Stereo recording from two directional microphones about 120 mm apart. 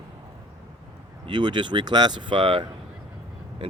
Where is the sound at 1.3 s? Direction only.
40° right (ahead or behind).